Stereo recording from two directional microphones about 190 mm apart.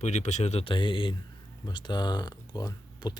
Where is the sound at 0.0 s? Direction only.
35° left (ahead or behind).